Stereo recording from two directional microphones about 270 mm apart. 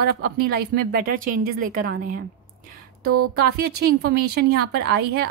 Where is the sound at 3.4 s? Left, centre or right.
Right.